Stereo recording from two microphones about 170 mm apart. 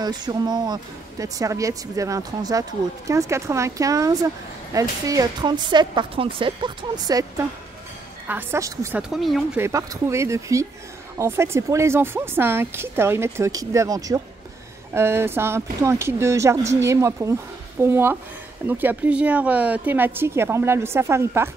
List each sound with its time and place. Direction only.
0.0 s a woman's voice: 25° right (ahead or behind)
9.1 s speech: centre (ahead or behind)
9.6 s speech: 15° right (ahead or behind)